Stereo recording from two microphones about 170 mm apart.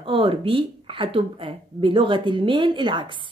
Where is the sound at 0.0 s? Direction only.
30° right (ahead or behind).